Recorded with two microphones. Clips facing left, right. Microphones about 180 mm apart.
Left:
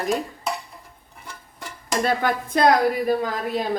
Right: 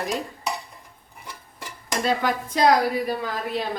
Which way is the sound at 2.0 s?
55° left (ahead or behind).